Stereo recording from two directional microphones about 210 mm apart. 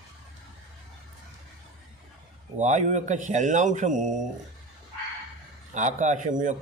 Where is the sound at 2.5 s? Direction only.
35° right (ahead or behind).